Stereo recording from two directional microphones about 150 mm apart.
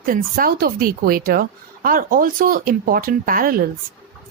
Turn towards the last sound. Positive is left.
turn(degrees=-70)  # may be behind; listen again after turning